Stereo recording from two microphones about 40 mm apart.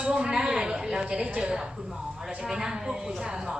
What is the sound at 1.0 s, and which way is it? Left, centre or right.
A woman's voice, right.